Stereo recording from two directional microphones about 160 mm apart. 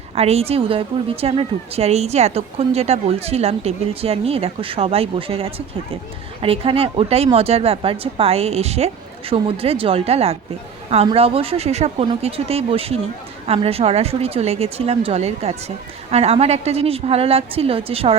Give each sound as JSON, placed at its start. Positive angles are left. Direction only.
{"t": 0.2, "sound": "speech", "side_deg": -40}